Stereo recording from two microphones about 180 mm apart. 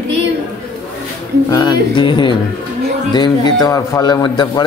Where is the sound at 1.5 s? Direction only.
25° left (ahead or behind).